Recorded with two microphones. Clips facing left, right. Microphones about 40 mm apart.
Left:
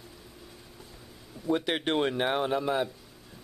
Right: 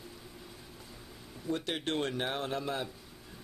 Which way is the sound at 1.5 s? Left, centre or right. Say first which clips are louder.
Left 6 dB; left.